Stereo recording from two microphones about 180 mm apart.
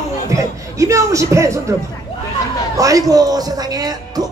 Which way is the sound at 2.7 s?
20° right (ahead or behind).